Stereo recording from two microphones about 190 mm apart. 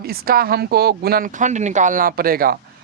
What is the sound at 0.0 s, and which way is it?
Speech, 50° right (ahead or behind).